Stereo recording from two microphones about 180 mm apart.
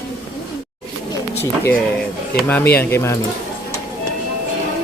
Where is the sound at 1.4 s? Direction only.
15° left (ahead or behind).